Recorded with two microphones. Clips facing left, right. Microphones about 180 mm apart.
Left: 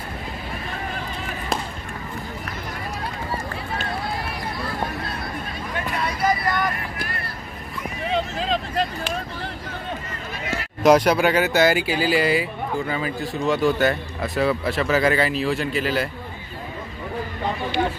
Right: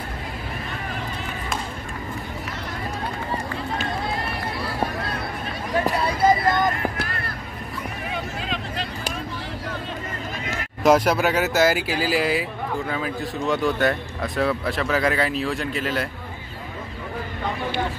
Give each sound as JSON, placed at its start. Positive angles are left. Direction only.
{"t": 5.9, "sound": "vehicle", "side_deg": -30}
{"t": 8.1, "sound": "vehicle", "side_deg": 30}
{"t": 10.8, "sound": "speech", "side_deg": -5}